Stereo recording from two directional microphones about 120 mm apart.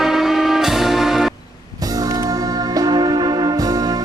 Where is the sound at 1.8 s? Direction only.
30° right (ahead or behind).